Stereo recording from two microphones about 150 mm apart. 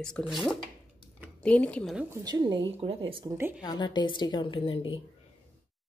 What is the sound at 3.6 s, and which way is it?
A woman's voice, 30° left (ahead or behind).